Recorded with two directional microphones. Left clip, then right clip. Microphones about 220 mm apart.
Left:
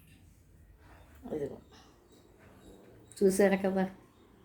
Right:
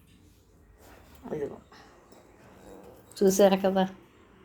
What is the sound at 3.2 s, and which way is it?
Speech, 10° right (ahead or behind).